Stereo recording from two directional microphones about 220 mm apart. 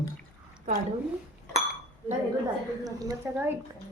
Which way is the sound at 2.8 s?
15° right (ahead or behind).